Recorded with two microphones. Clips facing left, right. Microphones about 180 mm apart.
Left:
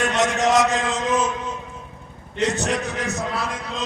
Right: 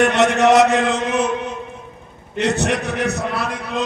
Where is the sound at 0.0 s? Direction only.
65° right (ahead or behind).